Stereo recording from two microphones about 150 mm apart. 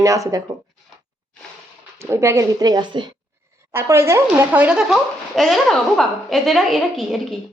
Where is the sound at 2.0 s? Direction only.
15° right (ahead or behind).